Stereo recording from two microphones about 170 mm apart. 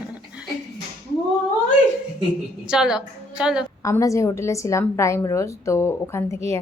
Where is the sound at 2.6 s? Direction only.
5° right (ahead or behind).